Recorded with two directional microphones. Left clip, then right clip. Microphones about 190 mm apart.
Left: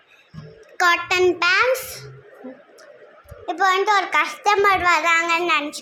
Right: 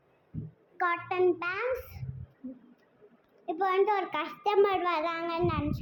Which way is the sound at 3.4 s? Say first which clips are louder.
Left 9 dB; 5° left (ahead or behind).